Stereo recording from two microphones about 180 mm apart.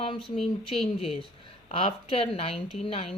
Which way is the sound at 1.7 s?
30° left (ahead or behind).